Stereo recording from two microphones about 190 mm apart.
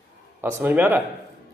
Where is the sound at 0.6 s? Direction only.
10° right (ahead or behind).